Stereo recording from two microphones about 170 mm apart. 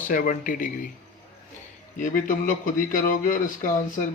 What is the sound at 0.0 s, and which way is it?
Speech, 50° left (ahead or behind).